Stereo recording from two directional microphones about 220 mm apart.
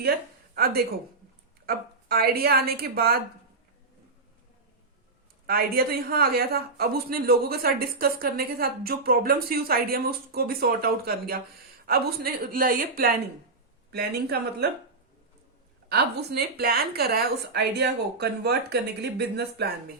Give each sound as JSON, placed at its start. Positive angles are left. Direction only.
{"t": 0.5, "sound": "speech", "side_deg": -45}
{"t": 5.5, "sound": "a woman's voice", "side_deg": -40}
{"t": 15.9, "sound": "speech", "side_deg": -45}